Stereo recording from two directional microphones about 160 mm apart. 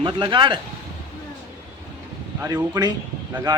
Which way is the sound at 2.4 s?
25° right (ahead or behind).